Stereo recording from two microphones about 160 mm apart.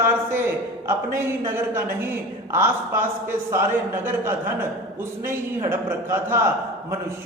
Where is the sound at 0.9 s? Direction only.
15° right (ahead or behind).